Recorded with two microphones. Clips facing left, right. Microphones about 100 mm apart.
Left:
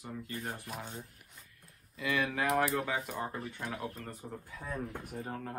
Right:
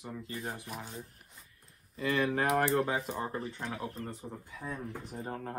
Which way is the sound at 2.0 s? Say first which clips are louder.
Right 3 dB; 35° right (ahead or behind).